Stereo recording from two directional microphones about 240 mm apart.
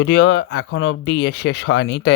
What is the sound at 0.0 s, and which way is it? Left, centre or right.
Speech, left.